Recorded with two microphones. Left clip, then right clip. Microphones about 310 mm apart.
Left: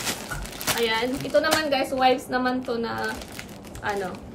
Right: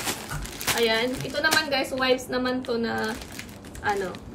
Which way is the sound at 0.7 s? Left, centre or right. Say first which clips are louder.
Right 1 dB; centre.